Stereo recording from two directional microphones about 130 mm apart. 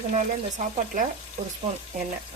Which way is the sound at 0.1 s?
70° right (ahead or behind).